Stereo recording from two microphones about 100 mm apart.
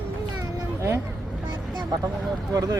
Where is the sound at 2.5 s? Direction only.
35° right (ahead or behind).